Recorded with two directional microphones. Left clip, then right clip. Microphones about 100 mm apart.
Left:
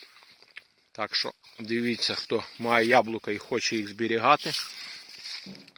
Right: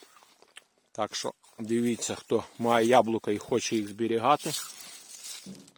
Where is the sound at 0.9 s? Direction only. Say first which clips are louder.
Left 2 dB; 30° right (ahead or behind).